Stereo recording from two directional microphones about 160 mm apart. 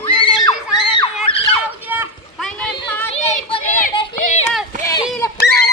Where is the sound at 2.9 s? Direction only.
10° left (ahead or behind).